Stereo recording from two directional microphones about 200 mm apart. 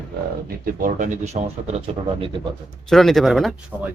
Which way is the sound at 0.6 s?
40° right (ahead or behind).